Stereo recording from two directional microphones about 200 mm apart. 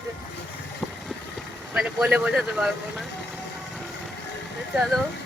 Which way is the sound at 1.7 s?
5° right (ahead or behind).